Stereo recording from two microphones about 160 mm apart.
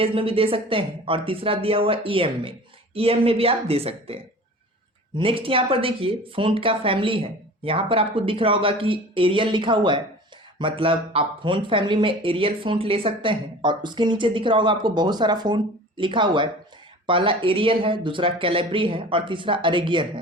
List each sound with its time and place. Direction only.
0.0 s speech: 35° right (ahead or behind)